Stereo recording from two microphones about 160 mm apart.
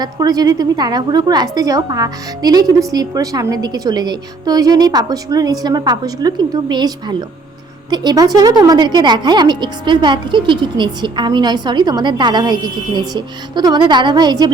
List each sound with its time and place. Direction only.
0.0 s a woman's voice: 25° right (ahead or behind)